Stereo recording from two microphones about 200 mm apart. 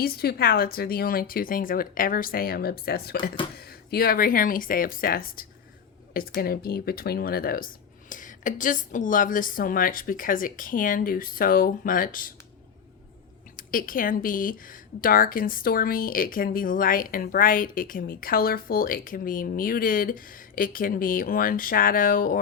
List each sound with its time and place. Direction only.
0.0 s speech: 50° left (ahead or behind)
13.6 s speech: 45° left (ahead or behind)